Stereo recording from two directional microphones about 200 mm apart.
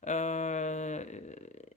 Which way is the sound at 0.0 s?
35° left (ahead or behind).